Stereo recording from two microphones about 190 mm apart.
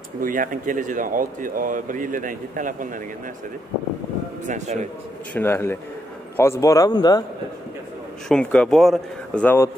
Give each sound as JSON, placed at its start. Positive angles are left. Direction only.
{"t": 0.2, "sound": "speech", "side_deg": -45}
{"t": 4.5, "sound": "a man's voice", "side_deg": -40}
{"t": 5.3, "sound": "a man's voice", "side_deg": 10}
{"t": 8.3, "sound": "speech", "side_deg": 5}